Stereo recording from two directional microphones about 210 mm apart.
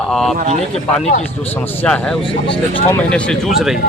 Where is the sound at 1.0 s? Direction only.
30° left (ahead or behind).